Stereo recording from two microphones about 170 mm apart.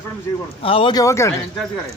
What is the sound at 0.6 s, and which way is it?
Speech, 35° left (ahead or behind).